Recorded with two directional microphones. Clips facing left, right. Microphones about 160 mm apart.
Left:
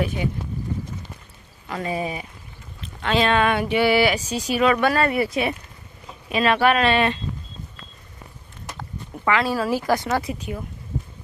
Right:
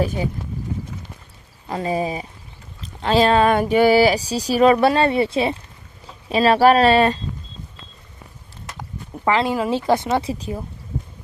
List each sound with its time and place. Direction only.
1.7 s speech: 35° right (ahead or behind)
9.2 s speech: 25° right (ahead or behind)